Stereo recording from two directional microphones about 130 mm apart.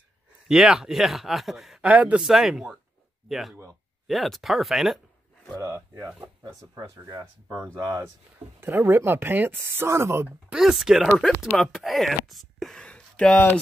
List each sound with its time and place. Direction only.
0.5 s speech: centre (ahead or behind)
5.6 s speech: 30° right (ahead or behind)
10.5 s speech: 5° right (ahead or behind)